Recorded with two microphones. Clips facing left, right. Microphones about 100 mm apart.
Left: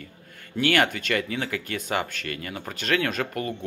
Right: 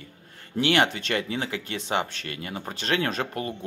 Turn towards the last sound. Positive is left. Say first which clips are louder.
# left 1 dB
turn(degrees=-30)  # may be behind; listen again after turning